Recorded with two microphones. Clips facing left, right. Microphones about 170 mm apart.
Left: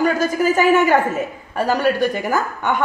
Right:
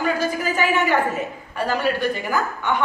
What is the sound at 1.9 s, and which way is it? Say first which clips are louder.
Speech: left 3 dB; 45° left (ahead or behind).